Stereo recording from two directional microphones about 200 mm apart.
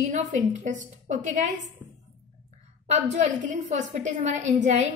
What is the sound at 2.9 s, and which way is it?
A woman's voice, 35° right (ahead or behind).